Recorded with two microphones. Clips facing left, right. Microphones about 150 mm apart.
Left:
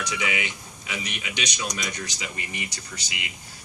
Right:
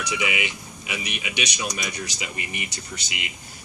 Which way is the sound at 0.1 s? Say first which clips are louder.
Right 2 dB; 20° right (ahead or behind).